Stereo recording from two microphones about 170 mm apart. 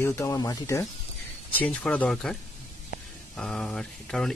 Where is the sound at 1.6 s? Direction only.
5° left (ahead or behind).